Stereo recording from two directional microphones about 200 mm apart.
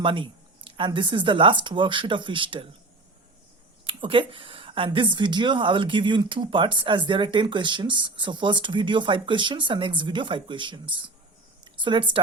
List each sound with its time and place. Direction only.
0.0 s speech: 25° right (ahead or behind)
3.8 s speech: 25° right (ahead or behind)